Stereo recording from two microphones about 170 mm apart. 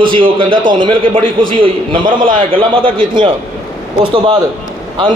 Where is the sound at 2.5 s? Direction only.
30° right (ahead or behind).